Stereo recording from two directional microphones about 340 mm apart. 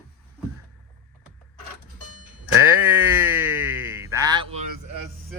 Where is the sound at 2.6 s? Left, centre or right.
Centre.